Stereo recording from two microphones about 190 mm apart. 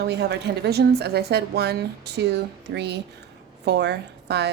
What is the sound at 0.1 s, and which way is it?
A woman's voice, 60° right (ahead or behind).